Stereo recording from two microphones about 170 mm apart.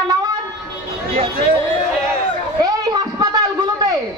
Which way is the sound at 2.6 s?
20° right (ahead or behind).